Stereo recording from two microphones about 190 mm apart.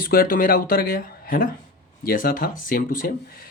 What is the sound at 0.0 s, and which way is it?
Speech, 50° left (ahead or behind).